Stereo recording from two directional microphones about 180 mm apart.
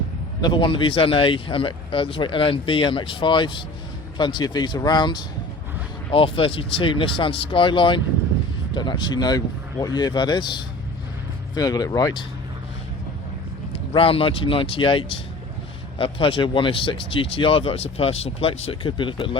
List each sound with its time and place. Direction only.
0.4 s speech: 25° left (ahead or behind)
13.7 s speech: 30° left (ahead or behind)